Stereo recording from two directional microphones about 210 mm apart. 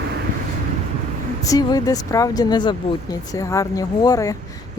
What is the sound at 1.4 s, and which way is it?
Speech, 15° left (ahead or behind).